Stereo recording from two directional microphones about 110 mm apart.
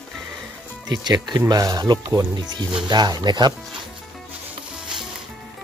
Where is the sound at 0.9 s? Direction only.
40° right (ahead or behind).